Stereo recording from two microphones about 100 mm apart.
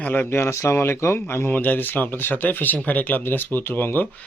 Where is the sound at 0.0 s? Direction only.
15° left (ahead or behind).